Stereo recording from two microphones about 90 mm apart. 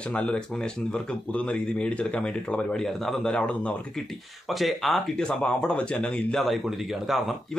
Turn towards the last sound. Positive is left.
turn(degrees=0)  # may be behind; listen again after turning